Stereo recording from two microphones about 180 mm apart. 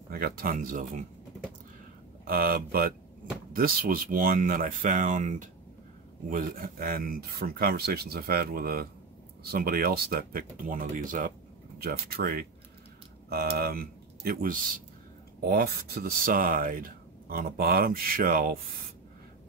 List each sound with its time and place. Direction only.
0.1 s speech: 55° right (ahead or behind)
2.2 s speech: 55° right (ahead or behind)
11.8 s speech: 60° right (ahead or behind)
15.4 s speech: 60° right (ahead or behind)